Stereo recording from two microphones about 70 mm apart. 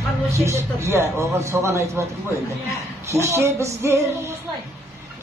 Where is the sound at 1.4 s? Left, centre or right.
Right.